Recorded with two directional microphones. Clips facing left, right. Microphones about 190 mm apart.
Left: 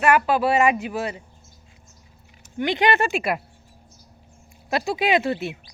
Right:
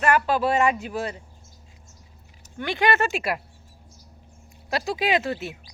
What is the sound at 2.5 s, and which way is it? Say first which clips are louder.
Speech: left 2 dB; 20° left (ahead or behind).